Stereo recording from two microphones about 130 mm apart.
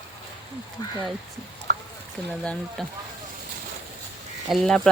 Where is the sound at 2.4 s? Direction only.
5° left (ahead or behind).